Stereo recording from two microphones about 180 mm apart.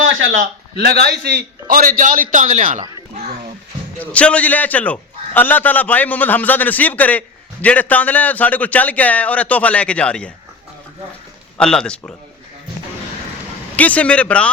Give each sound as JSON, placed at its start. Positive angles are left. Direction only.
{"t": 0.0, "sound": "a sound", "side_deg": -90}
{"t": 0.3, "sound": "a man's voice", "side_deg": -60}
{"t": 3.9, "sound": "a man's voice", "side_deg": 5}
{"t": 11.5, "sound": "speech", "side_deg": 5}
{"t": 13.7, "sound": "a man's voice", "side_deg": 10}